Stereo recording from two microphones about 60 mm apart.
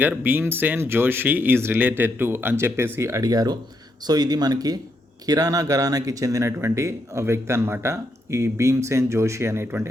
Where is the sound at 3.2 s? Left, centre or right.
Right.